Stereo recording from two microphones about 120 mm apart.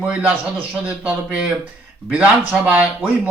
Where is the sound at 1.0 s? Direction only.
10° right (ahead or behind).